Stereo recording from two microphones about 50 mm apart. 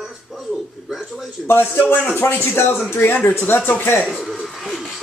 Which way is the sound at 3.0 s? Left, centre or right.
Left.